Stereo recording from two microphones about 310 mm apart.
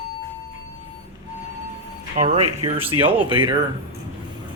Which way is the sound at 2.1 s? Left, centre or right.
Right.